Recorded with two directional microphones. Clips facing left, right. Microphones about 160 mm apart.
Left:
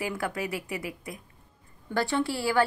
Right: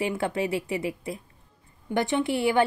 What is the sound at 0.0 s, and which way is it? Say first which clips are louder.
A woman's voice: right 5 dB; 25° right (ahead or behind).